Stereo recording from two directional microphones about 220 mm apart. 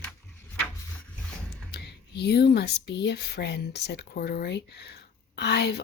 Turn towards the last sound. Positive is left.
turn(degrees=50)  # may be behind; listen again after turning